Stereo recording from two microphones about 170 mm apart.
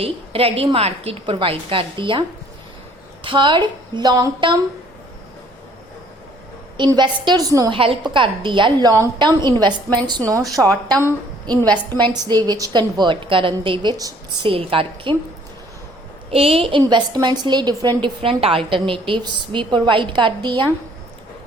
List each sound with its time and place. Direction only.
0.0 s a woman's voice: 35° right (ahead or behind)
3.2 s a woman's voice: 30° right (ahead or behind)
6.7 s a woman's voice: 25° right (ahead or behind)
7.8 s a woman's voice: 30° right (ahead or behind)
16.3 s a woman's voice: 35° right (ahead or behind)